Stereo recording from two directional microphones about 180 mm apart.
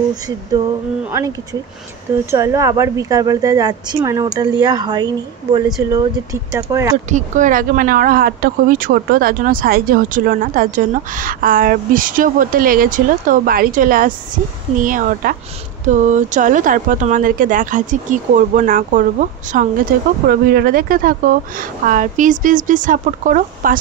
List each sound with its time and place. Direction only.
1.1 s a woman's voice: 20° right (ahead or behind)
7.1 s speech: 45° right (ahead or behind)
20.2 s speech: 55° right (ahead or behind)